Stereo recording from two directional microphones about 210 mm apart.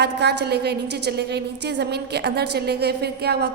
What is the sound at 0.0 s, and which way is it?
A woman's voice, 50° right (ahead or behind).